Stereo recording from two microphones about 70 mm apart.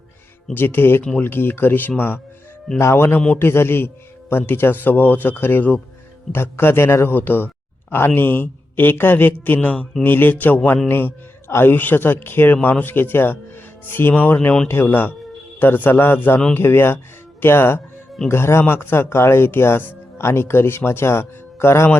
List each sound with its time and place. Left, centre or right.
0.5 s speech: left